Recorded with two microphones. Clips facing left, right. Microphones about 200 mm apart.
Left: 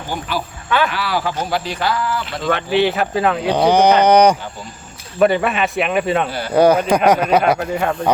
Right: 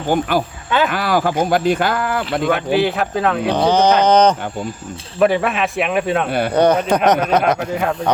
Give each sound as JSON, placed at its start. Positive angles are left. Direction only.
{"t": 0.1, "sound": "speech", "side_deg": -50}
{"t": 2.7, "sound": "speech", "side_deg": 0}
{"t": 3.5, "sound": "speech", "side_deg": 10}
{"t": 5.2, "sound": "speech", "side_deg": 0}